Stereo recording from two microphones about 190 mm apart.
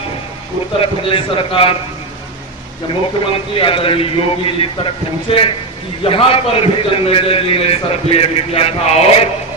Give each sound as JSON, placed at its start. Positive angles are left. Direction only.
{"t": 0.8, "sound": "a man's voice", "side_deg": 25}
{"t": 3.3, "sound": "a man's voice", "side_deg": 30}